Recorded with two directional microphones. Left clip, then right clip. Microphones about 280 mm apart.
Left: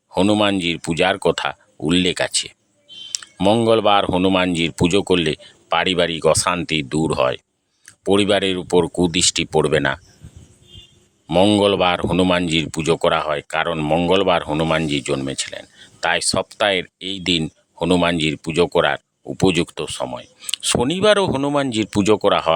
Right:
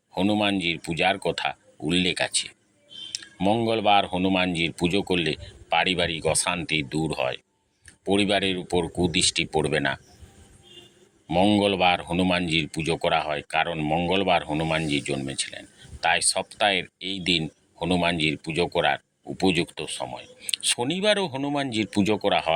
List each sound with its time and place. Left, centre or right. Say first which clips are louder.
0.1 s speech: left 7 dB; left
11.3 s speech: left 6 dB; left